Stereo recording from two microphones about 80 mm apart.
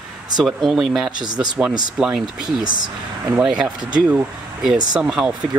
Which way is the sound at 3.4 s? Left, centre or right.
Centre.